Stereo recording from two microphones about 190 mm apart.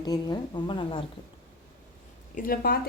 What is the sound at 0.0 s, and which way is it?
A woman's voice, 20° left (ahead or behind).